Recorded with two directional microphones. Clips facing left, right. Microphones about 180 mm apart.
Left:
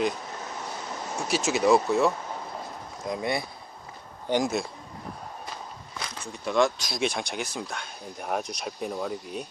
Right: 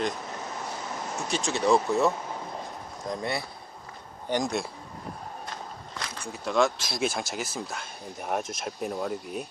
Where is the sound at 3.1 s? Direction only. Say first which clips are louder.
Left 2 dB; 15° left (ahead or behind).